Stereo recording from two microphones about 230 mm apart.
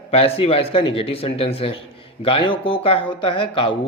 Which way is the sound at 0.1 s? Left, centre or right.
Left.